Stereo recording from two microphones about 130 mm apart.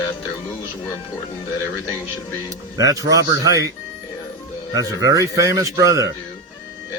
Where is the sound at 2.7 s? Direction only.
25° right (ahead or behind).